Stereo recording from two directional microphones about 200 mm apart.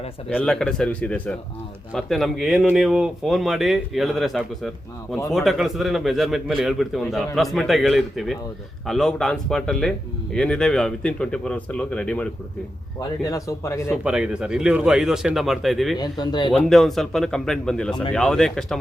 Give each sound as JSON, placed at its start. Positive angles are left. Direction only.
{"t": 0.3, "sound": "speech", "side_deg": 5}
{"t": 13.0, "sound": "speech", "side_deg": 15}
{"t": 13.9, "sound": "speech", "side_deg": -5}
{"t": 16.0, "sound": "speech", "side_deg": 20}
{"t": 16.6, "sound": "speech", "side_deg": 0}